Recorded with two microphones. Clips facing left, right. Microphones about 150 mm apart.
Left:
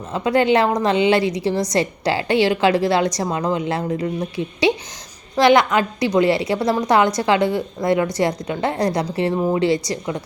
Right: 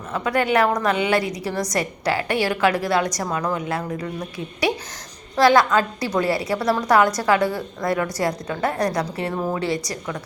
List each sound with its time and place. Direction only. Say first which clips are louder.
0.1 s a woman's voice: left 4 dB; 25° left (ahead or behind)